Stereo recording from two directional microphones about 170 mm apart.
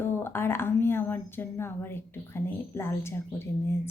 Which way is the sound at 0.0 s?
15° left (ahead or behind).